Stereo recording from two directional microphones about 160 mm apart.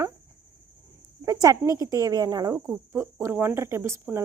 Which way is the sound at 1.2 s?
20° right (ahead or behind).